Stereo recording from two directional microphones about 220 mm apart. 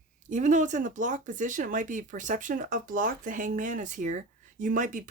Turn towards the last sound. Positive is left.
turn(degrees=-35)  # may be behind; listen again after turning